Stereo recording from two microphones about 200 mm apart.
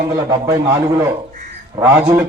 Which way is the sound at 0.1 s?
20° right (ahead or behind).